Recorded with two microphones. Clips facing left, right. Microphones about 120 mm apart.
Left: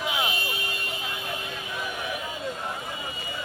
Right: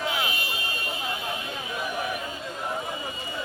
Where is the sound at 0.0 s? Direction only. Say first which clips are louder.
Even; 20° left (ahead or behind).